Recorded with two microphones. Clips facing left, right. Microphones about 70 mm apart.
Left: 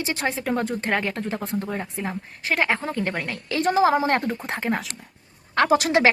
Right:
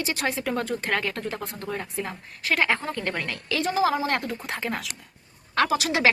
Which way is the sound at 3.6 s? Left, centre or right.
Left.